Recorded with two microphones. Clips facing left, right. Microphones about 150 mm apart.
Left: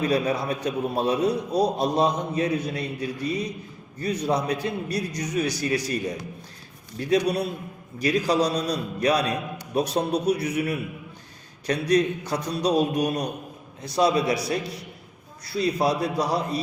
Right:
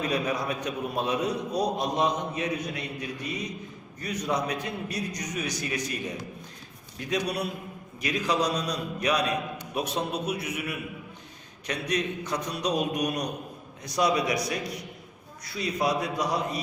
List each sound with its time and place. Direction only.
0.0 s a man's voice: 30° left (ahead or behind)